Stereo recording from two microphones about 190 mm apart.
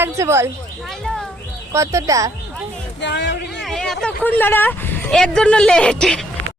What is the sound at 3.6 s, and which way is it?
Speech, centre (ahead or behind).